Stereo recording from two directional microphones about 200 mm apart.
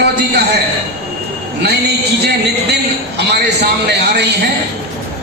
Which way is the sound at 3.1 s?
55° right (ahead or behind).